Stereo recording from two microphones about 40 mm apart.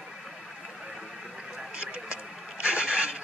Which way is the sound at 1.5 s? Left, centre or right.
Right.